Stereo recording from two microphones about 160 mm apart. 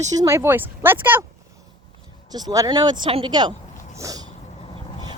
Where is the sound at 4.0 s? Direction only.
20° right (ahead or behind).